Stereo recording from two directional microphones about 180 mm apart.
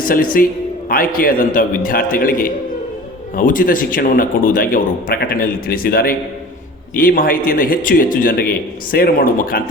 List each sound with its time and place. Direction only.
0.0 s a man's voice: 50° left (ahead or behind)